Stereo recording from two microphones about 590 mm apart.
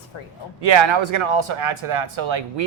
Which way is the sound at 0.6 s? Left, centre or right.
Right.